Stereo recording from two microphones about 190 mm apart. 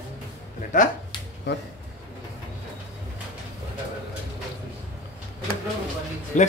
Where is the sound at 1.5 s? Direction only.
65° left (ahead or behind).